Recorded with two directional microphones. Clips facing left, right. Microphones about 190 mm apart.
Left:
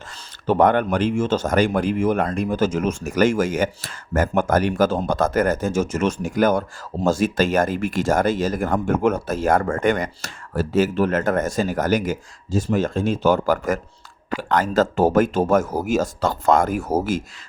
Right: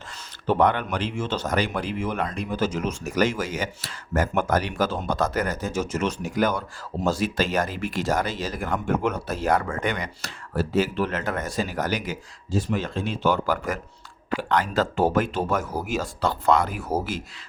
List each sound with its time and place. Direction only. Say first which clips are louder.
0.4 s speech: left 5 dB; 45° left (ahead or behind)